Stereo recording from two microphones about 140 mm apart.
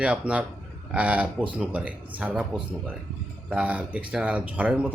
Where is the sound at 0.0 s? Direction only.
10° right (ahead or behind).